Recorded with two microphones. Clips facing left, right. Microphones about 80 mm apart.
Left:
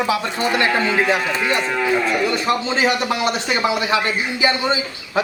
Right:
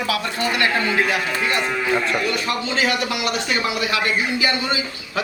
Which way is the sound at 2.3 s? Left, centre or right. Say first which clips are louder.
Left 3 dB; left.